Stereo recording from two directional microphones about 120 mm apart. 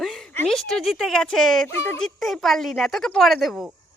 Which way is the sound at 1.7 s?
20° left (ahead or behind).